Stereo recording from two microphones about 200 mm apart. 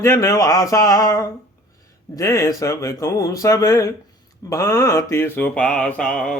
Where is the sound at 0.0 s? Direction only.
15° left (ahead or behind).